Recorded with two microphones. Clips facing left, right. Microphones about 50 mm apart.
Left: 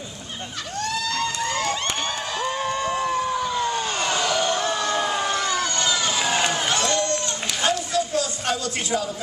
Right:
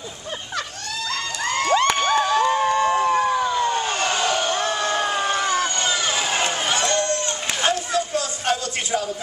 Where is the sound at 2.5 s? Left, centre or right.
Right.